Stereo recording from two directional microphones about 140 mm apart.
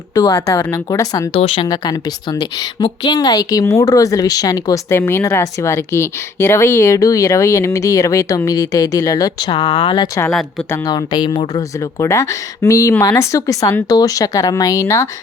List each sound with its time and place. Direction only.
0.1 s a woman's voice: 25° left (ahead or behind)
1.3 s speech: 40° left (ahead or behind)
1.6 s a woman's voice: 25° left (ahead or behind)